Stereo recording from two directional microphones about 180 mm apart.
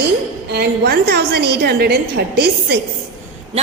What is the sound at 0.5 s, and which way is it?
A woman's voice, 65° right (ahead or behind).